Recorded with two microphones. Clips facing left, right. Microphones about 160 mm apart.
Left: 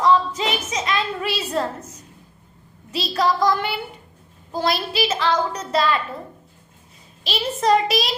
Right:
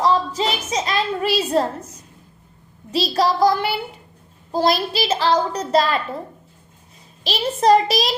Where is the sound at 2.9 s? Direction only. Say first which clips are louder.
Right 2 dB; 35° right (ahead or behind).